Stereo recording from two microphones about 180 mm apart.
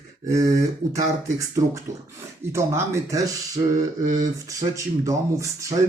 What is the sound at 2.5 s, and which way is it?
Speech, 15° right (ahead or behind).